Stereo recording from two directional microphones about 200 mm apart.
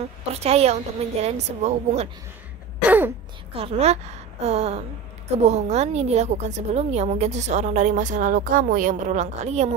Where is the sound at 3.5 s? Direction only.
30° right (ahead or behind).